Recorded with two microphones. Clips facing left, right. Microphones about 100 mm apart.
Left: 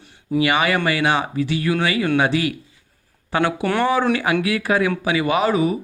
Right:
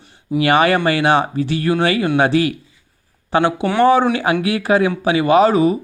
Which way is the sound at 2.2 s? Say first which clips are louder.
Right 4 dB; 35° right (ahead or behind).